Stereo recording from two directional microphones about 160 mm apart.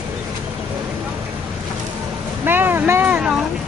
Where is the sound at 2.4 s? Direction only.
15° right (ahead or behind).